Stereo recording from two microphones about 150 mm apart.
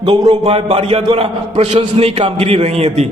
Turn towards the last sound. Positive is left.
turn(degrees=-45)  # may be behind; listen again after turning